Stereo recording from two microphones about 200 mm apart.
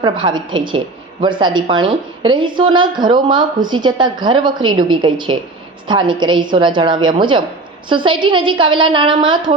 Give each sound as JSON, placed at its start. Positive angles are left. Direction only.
{"t": 0.0, "sound": "a woman's voice", "side_deg": -20}